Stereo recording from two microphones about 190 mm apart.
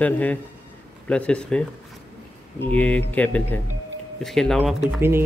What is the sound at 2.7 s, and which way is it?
Speech, 5° left (ahead or behind).